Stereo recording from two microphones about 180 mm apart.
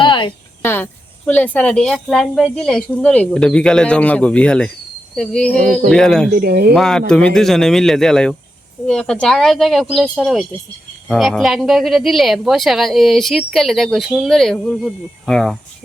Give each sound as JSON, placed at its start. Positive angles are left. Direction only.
{"t": 0.0, "sound": "cricket", "side_deg": 25}
{"t": 0.6, "sound": "speech", "side_deg": 10}
{"t": 6.3, "sound": "speech", "side_deg": -60}
{"t": 6.7, "sound": "speech", "side_deg": 5}